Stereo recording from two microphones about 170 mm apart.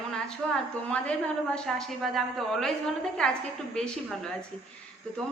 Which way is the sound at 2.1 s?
Centre (ahead or behind).